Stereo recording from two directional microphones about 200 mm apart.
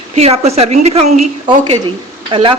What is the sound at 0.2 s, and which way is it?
A woman's voice, 30° right (ahead or behind).